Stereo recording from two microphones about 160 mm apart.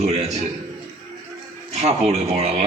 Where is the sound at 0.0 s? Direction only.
40° right (ahead or behind).